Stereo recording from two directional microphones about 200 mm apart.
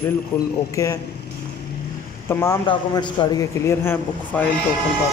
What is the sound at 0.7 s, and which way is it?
Speech, 15° left (ahead or behind).